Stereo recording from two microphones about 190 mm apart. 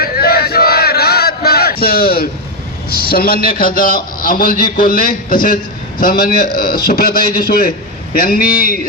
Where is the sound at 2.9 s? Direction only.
50° left (ahead or behind).